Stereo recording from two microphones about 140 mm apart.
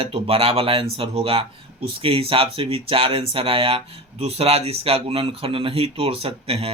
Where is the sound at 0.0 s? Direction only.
45° right (ahead or behind).